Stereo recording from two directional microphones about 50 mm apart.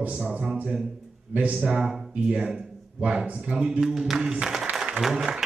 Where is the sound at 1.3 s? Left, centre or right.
Right.